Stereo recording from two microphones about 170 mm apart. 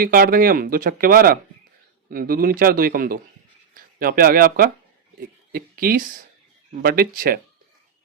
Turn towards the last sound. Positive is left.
turn(degrees=-60)  # may be behind; listen again after turning